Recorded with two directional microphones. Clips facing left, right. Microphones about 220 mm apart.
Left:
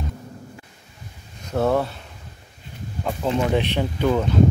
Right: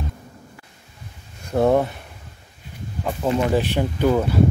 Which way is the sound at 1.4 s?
15° right (ahead or behind).